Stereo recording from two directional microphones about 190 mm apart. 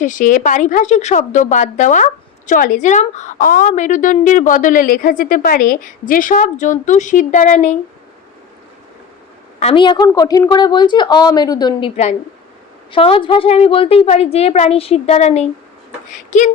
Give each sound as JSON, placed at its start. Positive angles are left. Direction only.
{"t": 0.0, "sound": "a woman's voice", "side_deg": 45}
{"t": 9.6, "sound": "a woman's voice", "side_deg": 30}
{"t": 12.9, "sound": "a woman's voice", "side_deg": 30}